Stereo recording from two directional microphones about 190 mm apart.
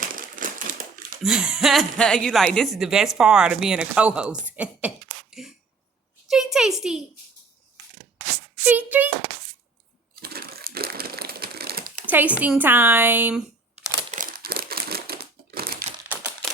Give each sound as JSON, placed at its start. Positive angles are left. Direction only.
{"t": 0.0, "sound": "crumpling", "side_deg": -45}
{"t": 1.2, "sound": "a woman's voice", "side_deg": -5}
{"t": 5.3, "sound": "a sound", "side_deg": 0}
{"t": 8.6, "sound": "speech", "side_deg": -10}
{"t": 10.2, "sound": "crumpling", "side_deg": -55}
{"t": 12.0, "sound": "speech", "side_deg": -10}
{"t": 14.1, "sound": "crumpling", "side_deg": -45}
{"t": 16.0, "sound": "typewriter", "side_deg": -10}